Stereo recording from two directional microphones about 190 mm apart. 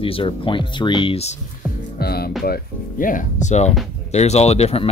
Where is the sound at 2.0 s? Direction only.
55° left (ahead or behind).